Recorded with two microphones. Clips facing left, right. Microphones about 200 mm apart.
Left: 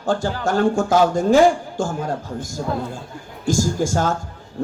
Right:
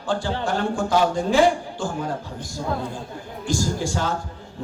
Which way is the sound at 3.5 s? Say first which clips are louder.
Left 5 dB; 45° left (ahead or behind).